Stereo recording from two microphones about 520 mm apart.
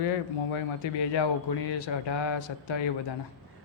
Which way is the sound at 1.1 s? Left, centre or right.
Left.